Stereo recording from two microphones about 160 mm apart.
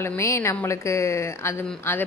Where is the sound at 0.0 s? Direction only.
15° left (ahead or behind).